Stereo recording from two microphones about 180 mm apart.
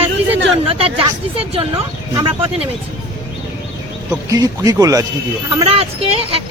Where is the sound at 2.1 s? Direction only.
30° right (ahead or behind).